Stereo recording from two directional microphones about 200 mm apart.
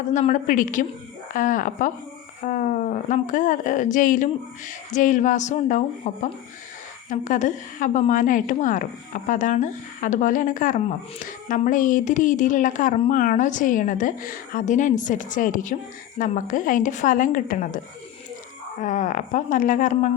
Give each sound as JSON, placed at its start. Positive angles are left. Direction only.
{"t": 0.1, "sound": "a woman's voice", "side_deg": 40}
{"t": 18.8, "sound": "a woman's voice", "side_deg": 40}